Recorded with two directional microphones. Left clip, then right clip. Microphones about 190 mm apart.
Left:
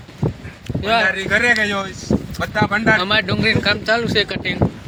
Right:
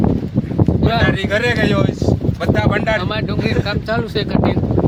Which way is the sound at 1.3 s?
50° right (ahead or behind).